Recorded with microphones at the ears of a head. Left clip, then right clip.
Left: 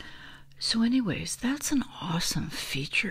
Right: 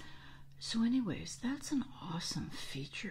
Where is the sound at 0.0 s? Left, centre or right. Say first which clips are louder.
Left 10 dB; left.